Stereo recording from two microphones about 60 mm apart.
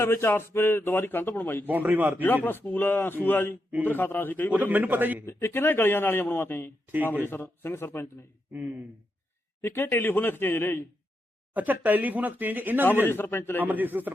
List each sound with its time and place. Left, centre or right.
0.0 s a man's voice: left
1.6 s a man's voice: right
2.2 s a man's voice: left
4.6 s a man's voice: right
5.2 s a man's voice: left
9.6 s a man's voice: left
11.5 s speech: right
13.1 s a man's voice: left
13.7 s a man's voice: right